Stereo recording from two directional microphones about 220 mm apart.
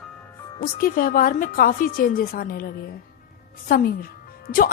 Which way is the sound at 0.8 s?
40° left (ahead or behind).